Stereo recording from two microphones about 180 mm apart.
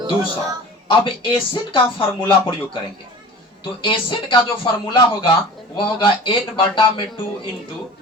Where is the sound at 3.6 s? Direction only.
25° left (ahead or behind).